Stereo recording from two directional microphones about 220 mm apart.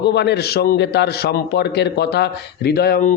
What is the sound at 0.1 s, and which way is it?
A man's voice, 50° left (ahead or behind).